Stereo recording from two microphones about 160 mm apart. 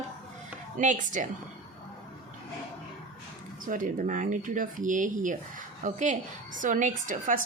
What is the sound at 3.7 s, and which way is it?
A woman's voice, 55° right (ahead or behind).